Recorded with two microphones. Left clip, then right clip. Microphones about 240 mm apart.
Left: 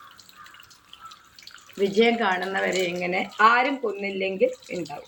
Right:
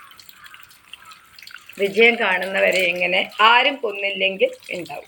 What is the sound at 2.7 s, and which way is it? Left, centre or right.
Speech, left.